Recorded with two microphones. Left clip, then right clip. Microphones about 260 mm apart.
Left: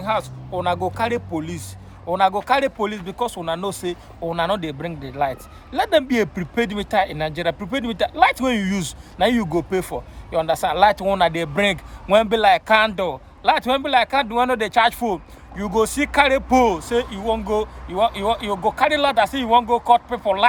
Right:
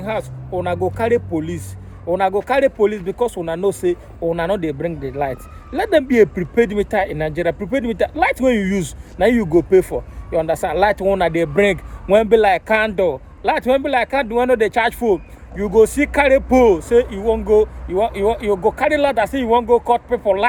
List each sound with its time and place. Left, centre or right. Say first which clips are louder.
0.0 s speech: left 1 dB; centre